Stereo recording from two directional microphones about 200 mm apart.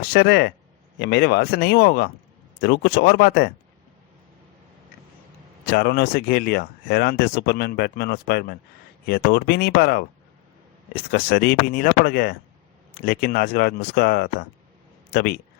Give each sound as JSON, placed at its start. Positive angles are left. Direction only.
{"t": 0.0, "sound": "speech", "side_deg": 50}
{"t": 5.6, "sound": "speech", "side_deg": 50}